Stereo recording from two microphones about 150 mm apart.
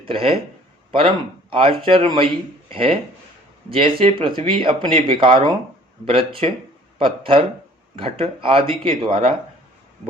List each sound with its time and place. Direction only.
0.0 s speech: 35° right (ahead or behind)